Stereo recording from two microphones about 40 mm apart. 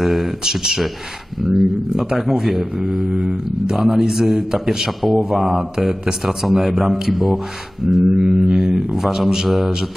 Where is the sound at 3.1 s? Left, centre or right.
Centre.